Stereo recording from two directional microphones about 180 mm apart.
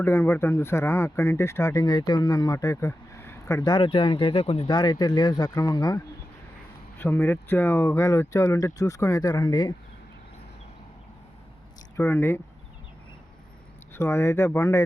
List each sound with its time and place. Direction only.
0.0 s speech: 15° left (ahead or behind)
7.0 s speech: 15° left (ahead or behind)
11.9 s speech: 15° left (ahead or behind)
13.9 s speech: 15° left (ahead or behind)